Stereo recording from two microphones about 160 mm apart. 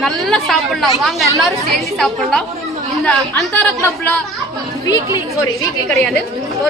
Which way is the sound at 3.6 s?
10° left (ahead or behind).